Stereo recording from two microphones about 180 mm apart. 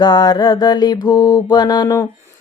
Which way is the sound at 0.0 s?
20° left (ahead or behind).